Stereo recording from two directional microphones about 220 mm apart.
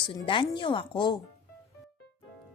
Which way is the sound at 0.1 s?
20° left (ahead or behind).